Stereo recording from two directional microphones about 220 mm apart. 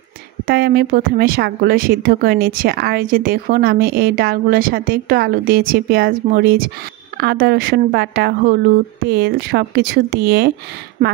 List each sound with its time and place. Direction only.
0.5 s speech: 45° right (ahead or behind)